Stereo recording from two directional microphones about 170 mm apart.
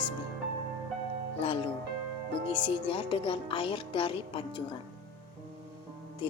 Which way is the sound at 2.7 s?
30° left (ahead or behind).